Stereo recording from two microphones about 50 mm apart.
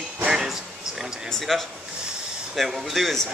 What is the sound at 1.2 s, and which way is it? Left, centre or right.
Speech, centre.